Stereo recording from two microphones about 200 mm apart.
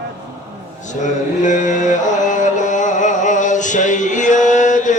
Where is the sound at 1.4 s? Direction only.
40° left (ahead or behind).